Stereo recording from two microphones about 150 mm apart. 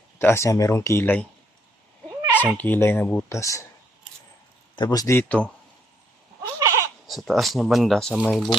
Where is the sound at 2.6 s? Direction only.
10° left (ahead or behind).